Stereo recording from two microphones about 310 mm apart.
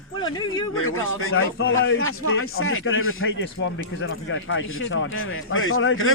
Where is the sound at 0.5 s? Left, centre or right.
Left.